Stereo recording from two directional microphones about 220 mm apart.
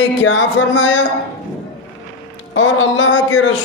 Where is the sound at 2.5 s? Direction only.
60° left (ahead or behind).